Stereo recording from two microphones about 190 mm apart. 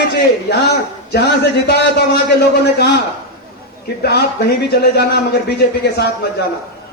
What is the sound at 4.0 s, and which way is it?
A man's voice, 60° left (ahead or behind).